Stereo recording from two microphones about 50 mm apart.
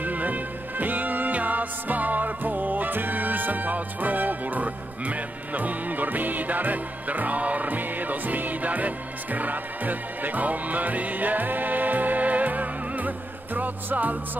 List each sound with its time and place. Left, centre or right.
0.0 s music: right